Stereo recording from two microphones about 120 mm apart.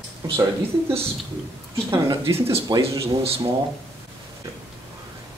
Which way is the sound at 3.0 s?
55° right (ahead or behind).